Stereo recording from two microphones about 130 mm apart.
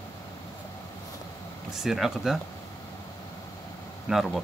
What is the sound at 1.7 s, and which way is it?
Speech, centre (ahead or behind).